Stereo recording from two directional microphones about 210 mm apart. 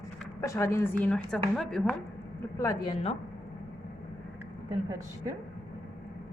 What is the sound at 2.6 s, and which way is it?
Speech, 20° left (ahead or behind).